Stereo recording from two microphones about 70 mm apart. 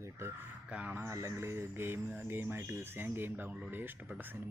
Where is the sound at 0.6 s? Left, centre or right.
Centre.